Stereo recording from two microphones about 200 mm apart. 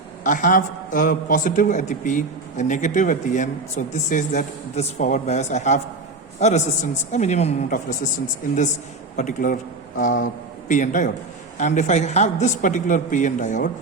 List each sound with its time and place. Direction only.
0.3 s a man's voice: 40° left (ahead or behind)
9.1 s a man's voice: 40° left (ahead or behind)